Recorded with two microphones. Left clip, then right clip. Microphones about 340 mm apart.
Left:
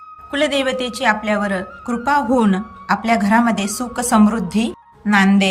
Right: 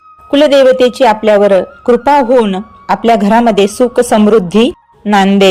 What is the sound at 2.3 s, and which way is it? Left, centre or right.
Speech, centre.